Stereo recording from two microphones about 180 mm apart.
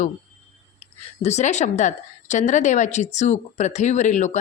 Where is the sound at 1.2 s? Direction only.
40° left (ahead or behind).